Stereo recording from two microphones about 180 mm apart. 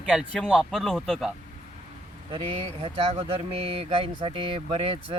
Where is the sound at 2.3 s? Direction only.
30° right (ahead or behind).